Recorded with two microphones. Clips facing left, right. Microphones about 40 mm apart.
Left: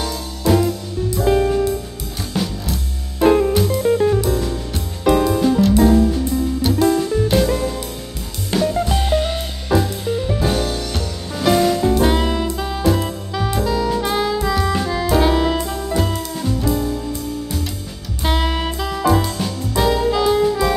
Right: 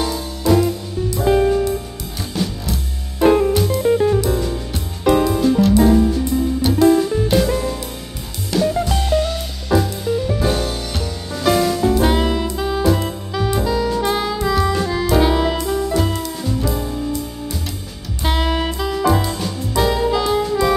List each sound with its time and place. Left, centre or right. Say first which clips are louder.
1.2 s music: right 1 dB; centre
8.5 s music: even; left
8.8 s music: left 1 dB; centre
9.1 s music: right 2 dB; left
9.7 s music: right 1 dB; centre
10.4 s music: even; centre
18.2 s music: right 1 dB; centre